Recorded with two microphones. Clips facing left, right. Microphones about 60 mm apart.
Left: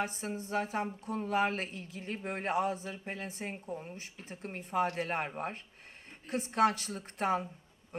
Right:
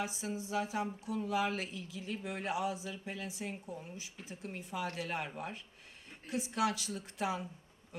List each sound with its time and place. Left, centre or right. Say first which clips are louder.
0.0 s a woman's voice: left 2 dB; left